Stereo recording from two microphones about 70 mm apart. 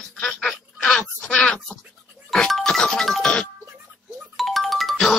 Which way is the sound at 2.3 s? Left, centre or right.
Centre.